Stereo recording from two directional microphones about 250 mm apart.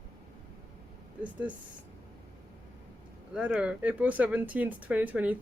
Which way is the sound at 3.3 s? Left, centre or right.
Centre.